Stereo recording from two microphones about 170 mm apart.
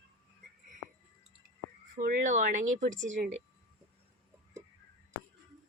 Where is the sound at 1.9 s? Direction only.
55° right (ahead or behind).